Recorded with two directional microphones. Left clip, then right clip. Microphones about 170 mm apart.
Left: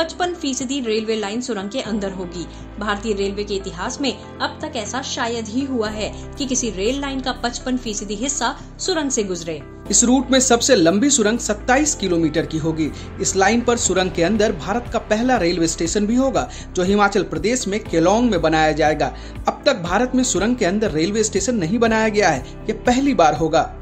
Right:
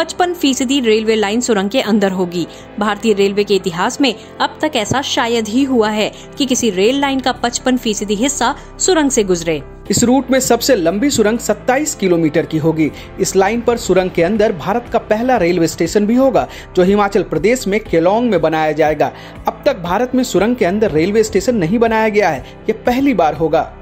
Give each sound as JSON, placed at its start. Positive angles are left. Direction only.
{"t": 0.0, "sound": "a woman's voice", "side_deg": -60}
{"t": 9.8, "sound": "speech", "side_deg": -35}